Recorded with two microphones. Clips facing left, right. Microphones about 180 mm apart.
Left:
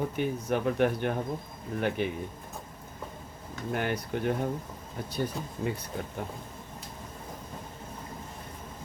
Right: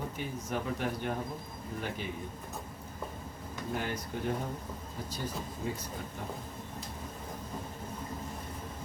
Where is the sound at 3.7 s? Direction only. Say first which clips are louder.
Left 5 dB; 65° left (ahead or behind).